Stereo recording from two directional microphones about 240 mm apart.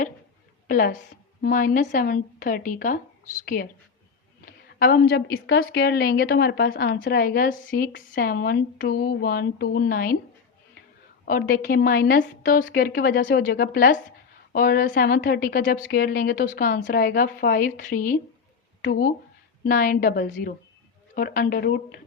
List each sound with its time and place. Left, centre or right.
0.7 s a woman's voice: left
11.3 s a woman's voice: left